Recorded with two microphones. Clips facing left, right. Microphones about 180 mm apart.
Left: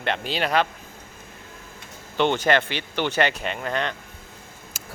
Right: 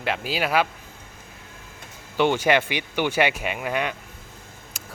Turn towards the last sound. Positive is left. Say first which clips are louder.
# even
turn(degrees=0)  # may be behind; listen again after turning